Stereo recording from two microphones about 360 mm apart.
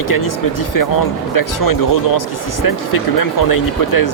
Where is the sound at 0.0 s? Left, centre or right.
Left.